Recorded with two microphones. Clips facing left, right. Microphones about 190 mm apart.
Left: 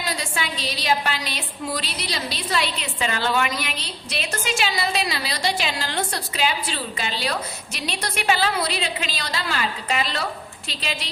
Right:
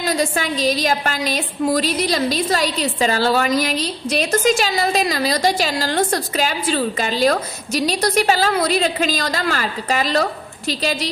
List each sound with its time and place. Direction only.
0.1 s a woman's voice: 45° right (ahead or behind)